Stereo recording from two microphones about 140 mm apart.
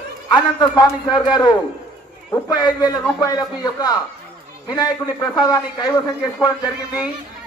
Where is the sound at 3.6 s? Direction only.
25° left (ahead or behind).